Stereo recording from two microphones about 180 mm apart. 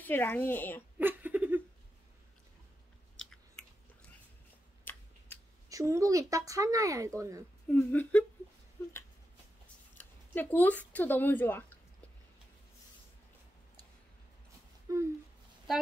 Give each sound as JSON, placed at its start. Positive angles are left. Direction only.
{"t": 0.0, "sound": "speech", "side_deg": 10}
{"t": 0.9, "sound": "giggle", "side_deg": -10}
{"t": 4.9, "sound": "scissors", "side_deg": 10}
{"t": 5.7, "sound": "speech", "side_deg": -20}
{"t": 7.6, "sound": "speech", "side_deg": 10}
{"t": 9.9, "sound": "speech", "side_deg": 10}
{"t": 14.9, "sound": "speech", "side_deg": -20}